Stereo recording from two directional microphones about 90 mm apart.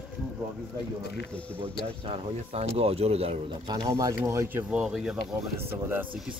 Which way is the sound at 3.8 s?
35° right (ahead or behind).